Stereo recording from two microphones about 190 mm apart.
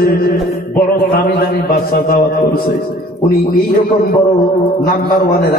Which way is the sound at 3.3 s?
50° left (ahead or behind).